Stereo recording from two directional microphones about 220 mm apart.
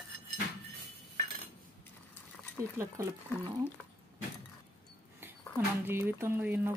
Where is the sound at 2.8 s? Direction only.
15° right (ahead or behind).